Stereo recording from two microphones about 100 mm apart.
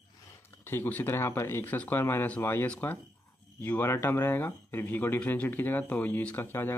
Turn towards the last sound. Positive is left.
turn(degrees=20)  # may be behind; listen again after turning